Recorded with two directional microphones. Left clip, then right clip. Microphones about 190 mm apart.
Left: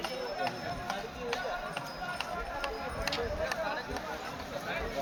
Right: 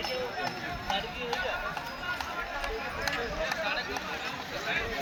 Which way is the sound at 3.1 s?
30° left (ahead or behind).